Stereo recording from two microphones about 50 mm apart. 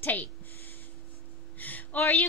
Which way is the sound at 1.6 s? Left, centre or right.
Left.